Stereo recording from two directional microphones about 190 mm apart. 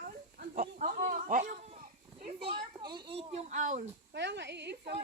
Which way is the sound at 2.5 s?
25° right (ahead or behind).